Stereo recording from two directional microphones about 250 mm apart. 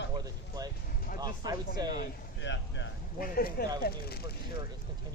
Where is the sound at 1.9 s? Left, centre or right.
Left.